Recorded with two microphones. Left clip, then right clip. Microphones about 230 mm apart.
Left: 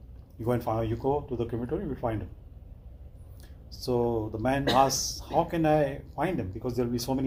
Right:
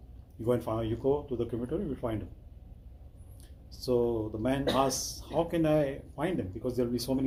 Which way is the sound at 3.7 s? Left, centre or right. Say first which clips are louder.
Left 1 dB; left.